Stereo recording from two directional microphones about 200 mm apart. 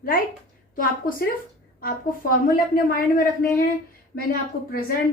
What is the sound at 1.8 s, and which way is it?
A woman's voice, 45° left (ahead or behind).